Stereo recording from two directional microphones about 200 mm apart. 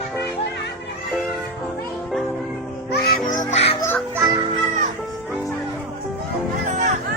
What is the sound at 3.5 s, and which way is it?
Music, 30° left (ahead or behind).